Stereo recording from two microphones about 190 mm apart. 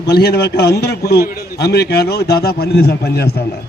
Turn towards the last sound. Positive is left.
turn(degrees=55)  # may be behind; listen again after turning